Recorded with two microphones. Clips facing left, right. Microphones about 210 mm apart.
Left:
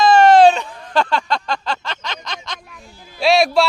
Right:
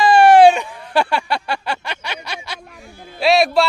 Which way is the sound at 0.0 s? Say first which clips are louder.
Right 1 dB; 15° right (ahead or behind).